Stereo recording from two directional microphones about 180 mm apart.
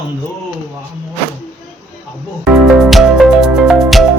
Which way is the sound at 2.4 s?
5° right (ahead or behind).